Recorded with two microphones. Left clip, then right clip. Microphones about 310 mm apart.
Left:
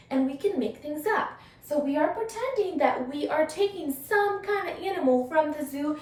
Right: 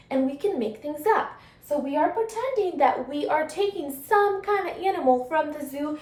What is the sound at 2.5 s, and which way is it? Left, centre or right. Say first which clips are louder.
A woman's voice: right 3 dB; centre.